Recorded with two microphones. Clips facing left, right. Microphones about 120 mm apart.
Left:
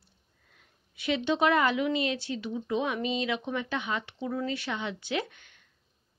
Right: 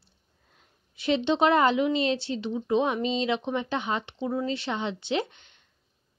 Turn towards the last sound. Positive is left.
turn(degrees=-25)  # may be behind; listen again after turning